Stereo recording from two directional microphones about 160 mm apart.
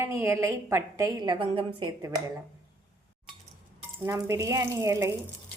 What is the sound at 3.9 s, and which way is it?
A woman's voice, 15° right (ahead or behind).